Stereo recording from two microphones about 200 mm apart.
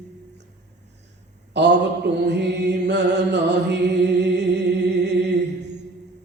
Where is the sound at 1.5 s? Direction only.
60° right (ahead or behind).